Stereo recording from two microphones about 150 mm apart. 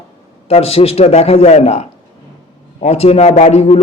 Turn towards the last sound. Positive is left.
turn(degrees=45)  # may be behind; listen again after turning